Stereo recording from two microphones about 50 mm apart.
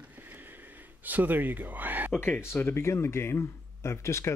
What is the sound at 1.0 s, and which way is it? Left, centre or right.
Speech, right.